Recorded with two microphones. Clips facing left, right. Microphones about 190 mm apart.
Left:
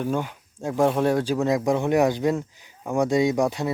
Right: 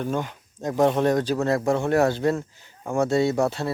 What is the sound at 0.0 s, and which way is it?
Speech, 10° left (ahead or behind).